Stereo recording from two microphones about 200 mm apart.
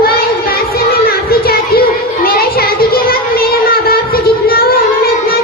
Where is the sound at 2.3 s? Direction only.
50° left (ahead or behind).